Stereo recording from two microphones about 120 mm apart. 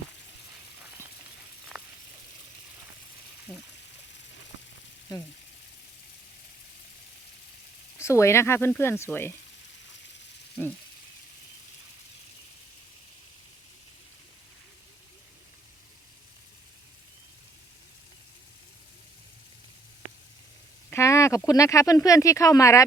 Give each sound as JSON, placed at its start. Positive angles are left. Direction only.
{"t": 1.7, "sound": "a sound", "side_deg": 0}
{"t": 3.5, "sound": "trickle", "side_deg": 15}
{"t": 5.1, "sound": "speech", "side_deg": 30}
{"t": 7.9, "sound": "speech", "side_deg": 25}
{"t": 10.6, "sound": "a sound", "side_deg": 15}
{"t": 20.9, "sound": "speech", "side_deg": 25}